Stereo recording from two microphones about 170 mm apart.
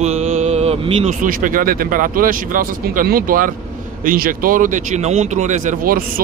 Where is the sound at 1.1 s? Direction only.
50° right (ahead or behind).